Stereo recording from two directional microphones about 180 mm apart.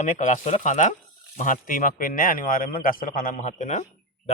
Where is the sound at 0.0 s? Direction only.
45° left (ahead or behind).